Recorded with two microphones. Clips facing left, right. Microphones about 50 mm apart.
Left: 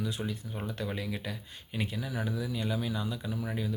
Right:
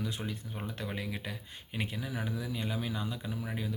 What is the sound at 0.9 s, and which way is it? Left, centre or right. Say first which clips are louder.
Speech: left 2 dB; right.